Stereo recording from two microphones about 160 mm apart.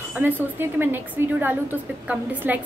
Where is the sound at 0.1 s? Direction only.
10° right (ahead or behind).